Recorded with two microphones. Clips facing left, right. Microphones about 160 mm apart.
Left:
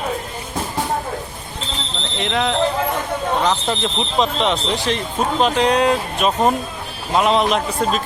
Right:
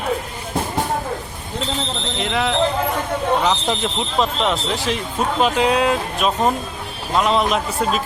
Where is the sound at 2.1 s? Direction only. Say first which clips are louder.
Left 1 dB; centre (ahead or behind).